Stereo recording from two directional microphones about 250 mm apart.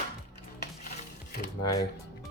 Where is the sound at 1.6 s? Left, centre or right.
Centre.